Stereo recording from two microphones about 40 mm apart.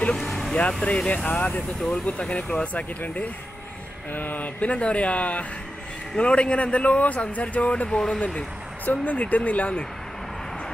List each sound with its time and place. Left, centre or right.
0.1 s vehicle: centre
0.8 s speech: left
1.8 s speech: centre
2.0 s speech: left
4.1 s speech: left
7.9 s speech: centre
9.0 s speech: left